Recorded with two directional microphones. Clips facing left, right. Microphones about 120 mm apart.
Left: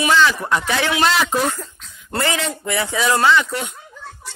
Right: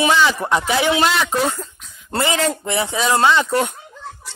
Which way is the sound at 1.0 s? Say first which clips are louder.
Even; centre (ahead or behind).